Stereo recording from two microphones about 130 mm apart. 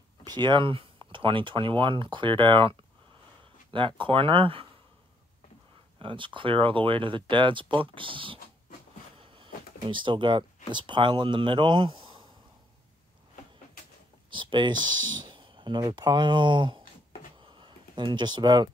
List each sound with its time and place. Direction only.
0.2 s speech: 35° right (ahead or behind)
5.9 s speech: 40° right (ahead or behind)
14.3 s speech: 40° right (ahead or behind)
17.4 s a sound: 40° right (ahead or behind)